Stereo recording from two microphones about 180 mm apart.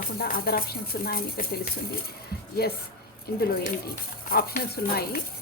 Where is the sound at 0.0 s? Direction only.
55° left (ahead or behind).